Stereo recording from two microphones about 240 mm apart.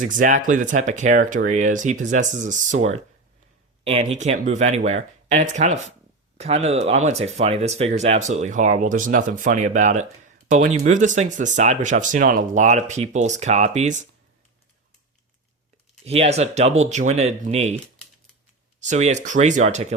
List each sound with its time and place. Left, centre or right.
0.0 s speech: right
4.2 s speech: right
16.0 s speech: right
18.8 s speech: right